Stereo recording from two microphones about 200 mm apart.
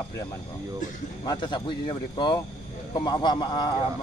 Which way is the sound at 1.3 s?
20° left (ahead or behind).